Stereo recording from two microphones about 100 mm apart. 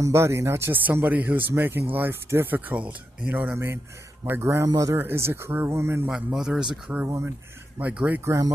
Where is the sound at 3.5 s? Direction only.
25° right (ahead or behind).